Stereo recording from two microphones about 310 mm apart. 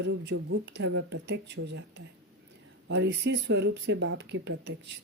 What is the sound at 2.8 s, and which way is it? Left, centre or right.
Speech, right.